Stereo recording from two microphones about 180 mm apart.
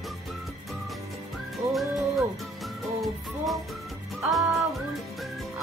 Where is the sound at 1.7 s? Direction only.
Centre (ahead or behind).